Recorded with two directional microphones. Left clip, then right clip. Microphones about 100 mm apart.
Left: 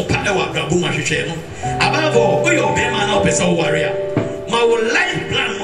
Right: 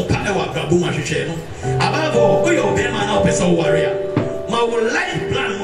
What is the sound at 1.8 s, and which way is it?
Music, 15° left (ahead or behind).